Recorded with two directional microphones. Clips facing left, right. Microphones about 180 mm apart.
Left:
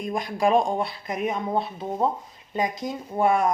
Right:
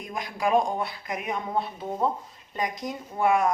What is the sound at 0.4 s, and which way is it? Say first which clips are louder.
Speech: left 2 dB; 25° left (ahead or behind).